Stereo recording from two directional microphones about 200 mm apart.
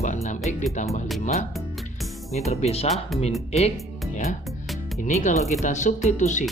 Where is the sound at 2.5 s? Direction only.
30° left (ahead or behind).